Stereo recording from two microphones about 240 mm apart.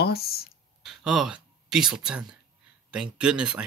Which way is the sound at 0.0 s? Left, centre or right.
Left.